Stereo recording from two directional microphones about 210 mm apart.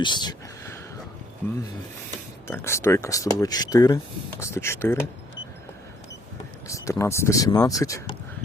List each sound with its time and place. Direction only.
0.0 s a sound: 20° left (ahead or behind)
2.5 s speech: 10° left (ahead or behind)
6.7 s speech: 15° left (ahead or behind)